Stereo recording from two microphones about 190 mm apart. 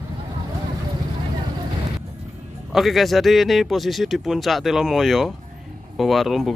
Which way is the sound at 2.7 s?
Centre (ahead or behind).